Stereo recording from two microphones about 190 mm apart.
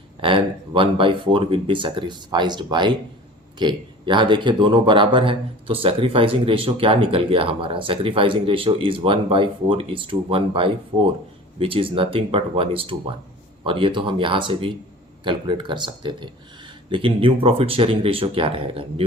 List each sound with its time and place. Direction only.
0.2 s speech: 25° right (ahead or behind)